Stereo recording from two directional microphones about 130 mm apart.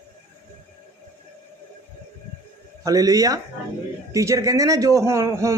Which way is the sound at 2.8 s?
25° right (ahead or behind).